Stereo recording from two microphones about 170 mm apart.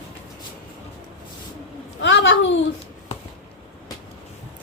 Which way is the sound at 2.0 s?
90° left.